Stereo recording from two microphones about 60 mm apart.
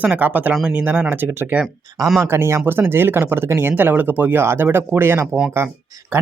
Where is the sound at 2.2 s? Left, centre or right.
Right.